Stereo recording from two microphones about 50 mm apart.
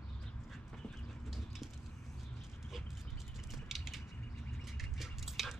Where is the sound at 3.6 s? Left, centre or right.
Centre.